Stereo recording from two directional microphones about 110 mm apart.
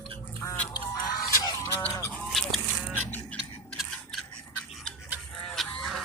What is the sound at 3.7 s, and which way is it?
Scissors, centre (ahead or behind).